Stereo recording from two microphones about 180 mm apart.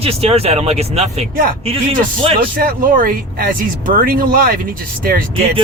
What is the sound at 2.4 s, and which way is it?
Speech, 55° right (ahead or behind).